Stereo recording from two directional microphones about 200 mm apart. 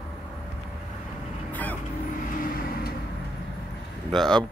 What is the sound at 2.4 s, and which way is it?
Vehicle, 45° left (ahead or behind).